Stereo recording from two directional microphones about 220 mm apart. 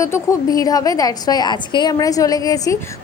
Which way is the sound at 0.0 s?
15° left (ahead or behind).